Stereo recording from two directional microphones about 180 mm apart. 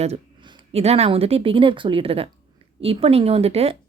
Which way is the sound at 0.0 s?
35° right (ahead or behind).